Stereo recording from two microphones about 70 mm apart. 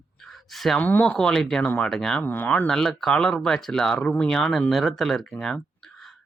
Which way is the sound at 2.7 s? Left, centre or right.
Centre.